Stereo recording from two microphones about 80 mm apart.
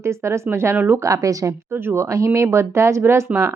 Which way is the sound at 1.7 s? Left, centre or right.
Right.